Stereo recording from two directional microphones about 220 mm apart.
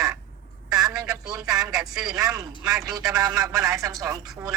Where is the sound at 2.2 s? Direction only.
15° right (ahead or behind).